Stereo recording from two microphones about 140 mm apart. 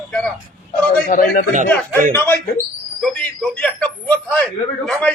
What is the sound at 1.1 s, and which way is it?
Speech, 90° left.